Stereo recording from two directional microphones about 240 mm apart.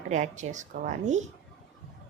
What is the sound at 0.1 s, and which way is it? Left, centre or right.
A woman's voice, right.